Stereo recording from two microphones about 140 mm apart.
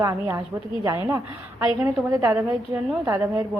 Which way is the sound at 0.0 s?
25° right (ahead or behind).